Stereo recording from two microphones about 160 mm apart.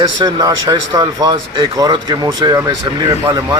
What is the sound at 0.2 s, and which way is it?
A man's voice, 25° right (ahead or behind).